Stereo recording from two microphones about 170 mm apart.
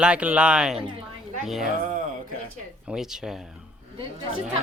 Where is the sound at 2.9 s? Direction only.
5° right (ahead or behind).